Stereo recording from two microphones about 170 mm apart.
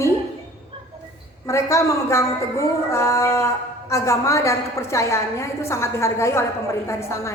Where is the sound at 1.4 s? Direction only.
15° left (ahead or behind).